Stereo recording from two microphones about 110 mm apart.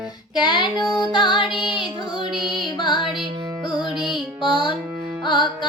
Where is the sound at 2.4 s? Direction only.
45° left (ahead or behind).